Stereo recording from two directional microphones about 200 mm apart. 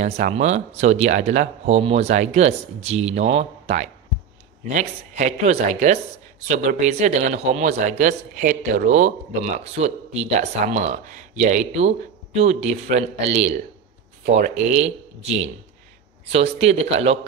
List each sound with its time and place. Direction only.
0.0 s speech: 35° right (ahead or behind)
16.3 s speech: 30° right (ahead or behind)